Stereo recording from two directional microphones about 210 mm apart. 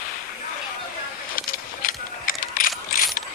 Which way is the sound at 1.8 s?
40° left (ahead or behind).